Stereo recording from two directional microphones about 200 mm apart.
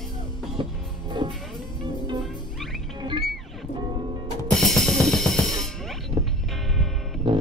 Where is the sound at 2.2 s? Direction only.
Centre (ahead or behind).